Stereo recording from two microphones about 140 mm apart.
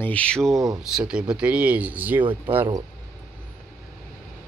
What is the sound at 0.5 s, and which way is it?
Speech, 25° right (ahead or behind).